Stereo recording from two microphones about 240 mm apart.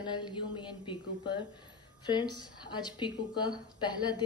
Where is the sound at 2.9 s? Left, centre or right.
Centre.